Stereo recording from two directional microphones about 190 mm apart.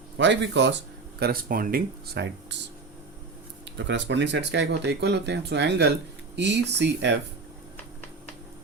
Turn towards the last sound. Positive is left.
turn(degrees=-65)  # may be behind; listen again after turning